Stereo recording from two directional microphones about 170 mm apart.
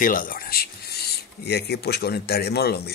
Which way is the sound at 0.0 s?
55° left (ahead or behind).